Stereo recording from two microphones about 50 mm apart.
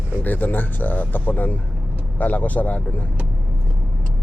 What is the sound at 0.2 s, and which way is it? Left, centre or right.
Speech, left.